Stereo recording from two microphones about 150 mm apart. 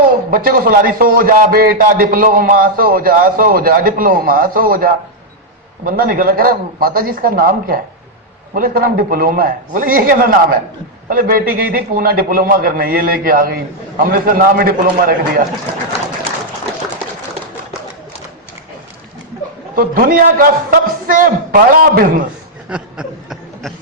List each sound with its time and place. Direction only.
0.3 s a man's voice: 75° right (ahead or behind)
1.8 s a man's voice: 70° right (ahead or behind)
19.7 s a man's voice: 70° right (ahead or behind)
22.7 s a sound: 5° right (ahead or behind)